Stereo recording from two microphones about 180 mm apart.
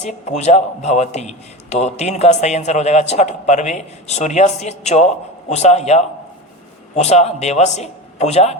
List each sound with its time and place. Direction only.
0.0 s a man's voice: 40° left (ahead or behind)